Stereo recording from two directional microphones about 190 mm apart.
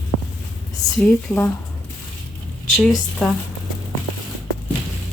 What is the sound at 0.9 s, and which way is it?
Speech, 5° left (ahead or behind).